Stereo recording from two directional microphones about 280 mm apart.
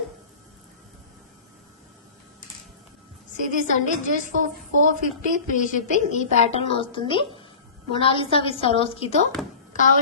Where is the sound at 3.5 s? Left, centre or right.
Left.